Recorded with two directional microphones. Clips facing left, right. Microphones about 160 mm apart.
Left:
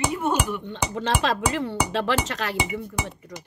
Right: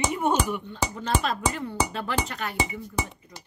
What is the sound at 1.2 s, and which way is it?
Speech, 90° left.